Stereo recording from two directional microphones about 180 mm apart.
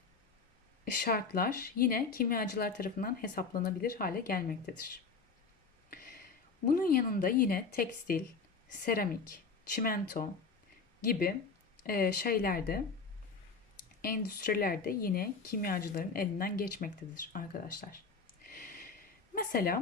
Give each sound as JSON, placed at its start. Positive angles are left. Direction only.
{"t": 1.0, "sound": "speech", "side_deg": 55}
{"t": 6.7, "sound": "a woman's voice", "side_deg": 50}
{"t": 14.0, "sound": "a woman's voice", "side_deg": 55}
{"t": 18.5, "sound": "a sound", "side_deg": 50}